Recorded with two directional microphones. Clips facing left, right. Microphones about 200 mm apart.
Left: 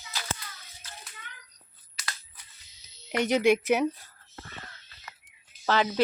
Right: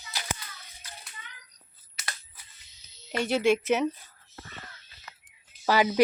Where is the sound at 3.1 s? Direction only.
15° left (ahead or behind).